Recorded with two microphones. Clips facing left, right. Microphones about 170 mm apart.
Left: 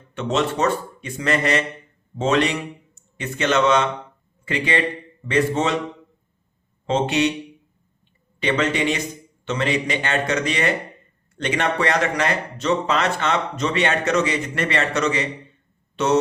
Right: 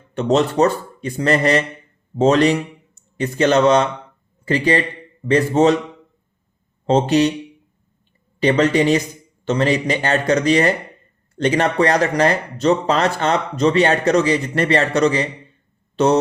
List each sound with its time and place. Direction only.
0.1 s speech: 35° right (ahead or behind)
6.8 s speech: 40° right (ahead or behind)
8.4 s speech: 40° right (ahead or behind)